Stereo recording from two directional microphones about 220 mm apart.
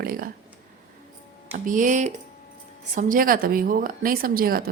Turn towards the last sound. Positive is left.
turn(degrees=-40)  # may be behind; listen again after turning